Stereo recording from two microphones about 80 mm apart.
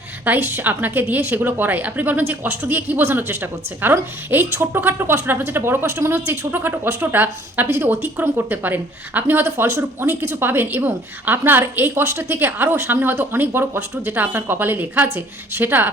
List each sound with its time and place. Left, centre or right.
0.3 s a woman's voice: right